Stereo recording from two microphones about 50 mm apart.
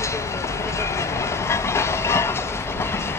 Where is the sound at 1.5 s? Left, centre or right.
Left.